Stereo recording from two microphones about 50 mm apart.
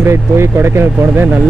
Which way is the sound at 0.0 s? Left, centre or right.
Right.